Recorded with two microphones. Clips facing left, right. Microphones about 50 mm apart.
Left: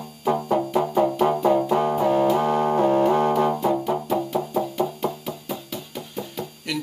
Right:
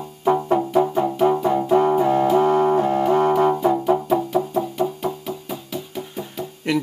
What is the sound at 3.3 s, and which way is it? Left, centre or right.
Brass instrument, right.